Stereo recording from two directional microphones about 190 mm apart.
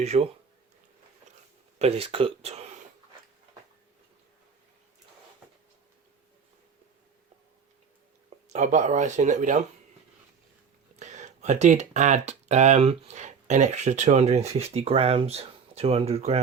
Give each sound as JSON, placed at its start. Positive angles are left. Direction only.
{"t": 0.0, "sound": "speech", "side_deg": -35}
{"t": 1.8, "sound": "speech", "side_deg": -30}
{"t": 8.4, "sound": "speech", "side_deg": -40}
{"t": 11.0, "sound": "speech", "side_deg": -40}